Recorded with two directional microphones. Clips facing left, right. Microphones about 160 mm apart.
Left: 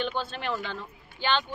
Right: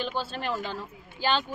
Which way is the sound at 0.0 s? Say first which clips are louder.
Left 1 dB; 5° right (ahead or behind).